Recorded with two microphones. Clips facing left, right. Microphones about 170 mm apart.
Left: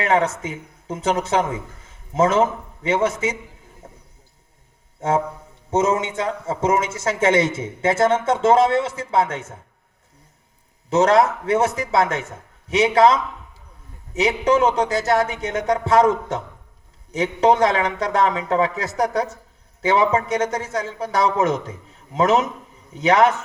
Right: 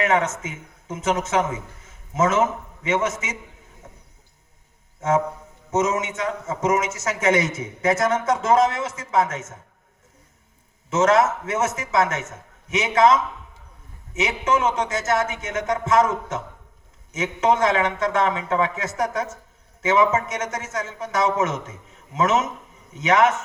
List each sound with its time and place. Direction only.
0.0 s speech: 35° left (ahead or behind)
3.8 s a sound: 30° left (ahead or behind)
4.9 s music: 30° left (ahead or behind)
5.7 s speech: 30° left (ahead or behind)
10.8 s speech: 35° left (ahead or behind)